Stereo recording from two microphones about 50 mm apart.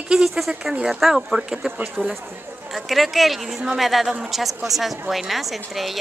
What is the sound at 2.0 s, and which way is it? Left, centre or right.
A woman's voice, centre.